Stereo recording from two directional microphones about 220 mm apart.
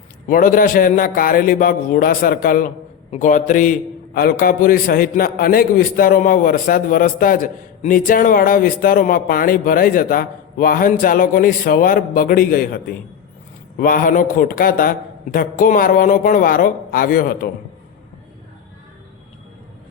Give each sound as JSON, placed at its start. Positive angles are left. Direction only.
{"t": 0.3, "sound": "a man's voice", "side_deg": 40}